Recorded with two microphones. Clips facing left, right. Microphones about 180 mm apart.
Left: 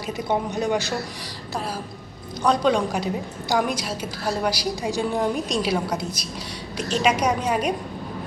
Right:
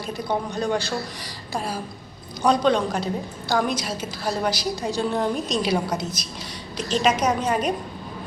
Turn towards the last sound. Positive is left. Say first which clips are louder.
# even
turn(degrees=10)  # may be behind; listen again after turning